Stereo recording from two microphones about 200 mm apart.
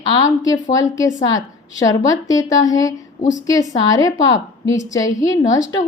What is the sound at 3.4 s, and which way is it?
A woman's voice, 15° left (ahead or behind).